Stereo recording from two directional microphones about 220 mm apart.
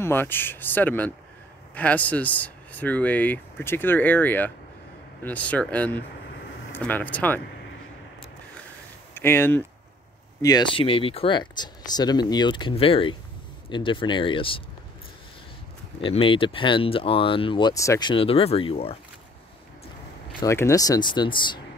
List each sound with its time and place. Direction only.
0.0 s speech: 10° left (ahead or behind)
9.1 s speech: 10° left (ahead or behind)
10.4 s speech: 20° left (ahead or behind)
16.0 s speech: 25° left (ahead or behind)
20.3 s speech: 15° left (ahead or behind)